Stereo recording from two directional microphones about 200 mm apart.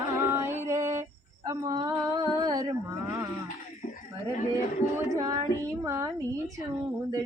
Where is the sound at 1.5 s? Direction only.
20° right (ahead or behind).